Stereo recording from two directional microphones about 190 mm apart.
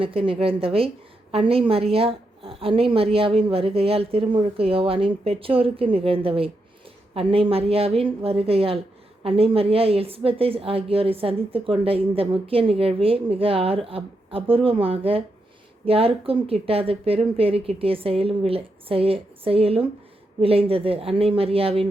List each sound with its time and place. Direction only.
0.0 s speech: 30° right (ahead or behind)